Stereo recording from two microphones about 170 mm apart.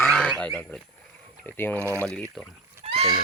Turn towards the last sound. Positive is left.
turn(degrees=-40)  # may be behind; listen again after turning